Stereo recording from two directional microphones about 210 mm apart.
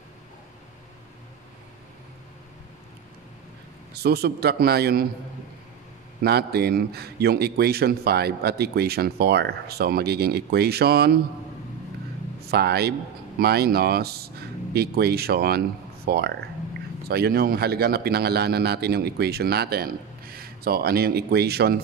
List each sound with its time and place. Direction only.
3.9 s a man's voice: 50° right (ahead or behind)
6.2 s a man's voice: 50° right (ahead or behind)
12.4 s a man's voice: 50° right (ahead or behind)